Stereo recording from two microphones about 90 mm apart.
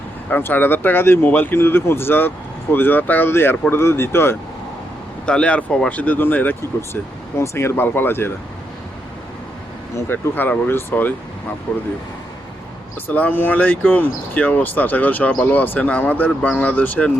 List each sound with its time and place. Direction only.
0.3 s speech: 20° left (ahead or behind)
5.2 s speech: 10° left (ahead or behind)
9.9 s speech: 20° left (ahead or behind)
13.1 s speech: 20° left (ahead or behind)